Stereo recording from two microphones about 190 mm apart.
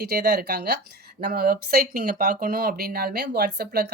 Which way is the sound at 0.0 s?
55° right (ahead or behind).